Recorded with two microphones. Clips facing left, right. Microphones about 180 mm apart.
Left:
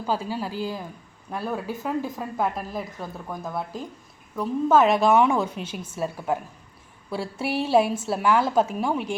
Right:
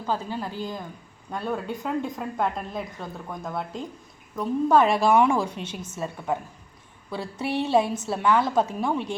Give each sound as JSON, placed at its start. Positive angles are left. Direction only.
{"t": 0.0, "sound": "a woman's voice", "side_deg": 10}
{"t": 5.5, "sound": "a woman's voice", "side_deg": -30}
{"t": 6.0, "sound": "a woman's voice", "side_deg": 5}